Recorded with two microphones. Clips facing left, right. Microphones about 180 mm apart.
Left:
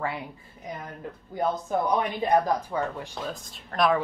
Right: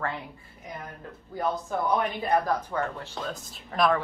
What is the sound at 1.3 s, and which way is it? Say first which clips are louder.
Speech: left 2 dB; 20° left (ahead or behind).